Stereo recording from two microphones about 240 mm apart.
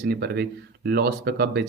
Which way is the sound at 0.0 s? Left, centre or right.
Right.